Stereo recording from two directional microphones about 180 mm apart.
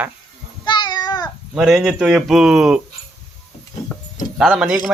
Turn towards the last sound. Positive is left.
turn(degrees=-5)  # may be behind; listen again after turning